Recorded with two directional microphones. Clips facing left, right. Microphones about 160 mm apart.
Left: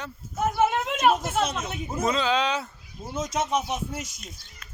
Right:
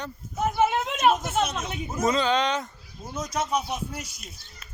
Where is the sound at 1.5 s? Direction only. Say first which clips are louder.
Even; 10° left (ahead or behind).